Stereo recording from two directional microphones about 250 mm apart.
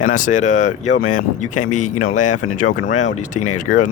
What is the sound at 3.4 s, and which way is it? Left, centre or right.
Speech, left.